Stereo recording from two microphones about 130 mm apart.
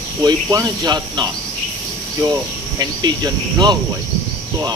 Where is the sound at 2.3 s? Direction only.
30° right (ahead or behind).